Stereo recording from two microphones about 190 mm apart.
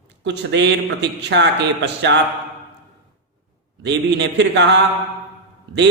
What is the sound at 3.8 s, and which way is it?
Speech, 65° right (ahead or behind).